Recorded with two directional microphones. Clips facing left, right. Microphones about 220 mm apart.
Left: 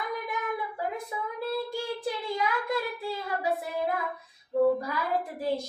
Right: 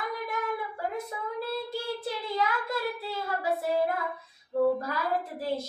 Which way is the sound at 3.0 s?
15° left (ahead or behind).